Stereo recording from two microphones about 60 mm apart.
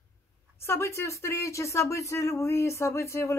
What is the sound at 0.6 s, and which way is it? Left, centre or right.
Speech, left.